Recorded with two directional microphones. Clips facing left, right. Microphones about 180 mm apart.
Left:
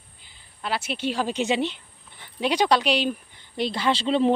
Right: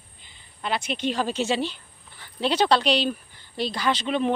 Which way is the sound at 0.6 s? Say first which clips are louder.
Right 1 dB; 5° left (ahead or behind).